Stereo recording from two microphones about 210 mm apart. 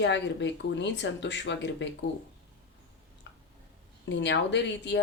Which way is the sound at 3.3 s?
55° left (ahead or behind).